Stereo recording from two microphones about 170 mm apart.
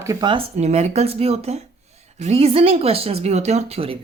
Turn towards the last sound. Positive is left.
turn(degrees=-35)  # may be behind; listen again after turning